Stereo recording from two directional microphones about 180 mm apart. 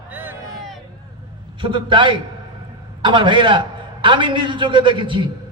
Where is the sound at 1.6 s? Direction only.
25° right (ahead or behind).